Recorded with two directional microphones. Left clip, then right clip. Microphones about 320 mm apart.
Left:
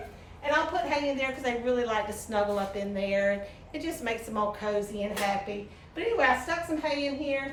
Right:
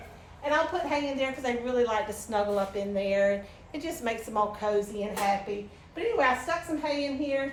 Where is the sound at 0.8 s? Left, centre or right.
Centre.